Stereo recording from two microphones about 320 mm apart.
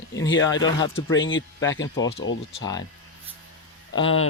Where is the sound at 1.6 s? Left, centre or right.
Centre.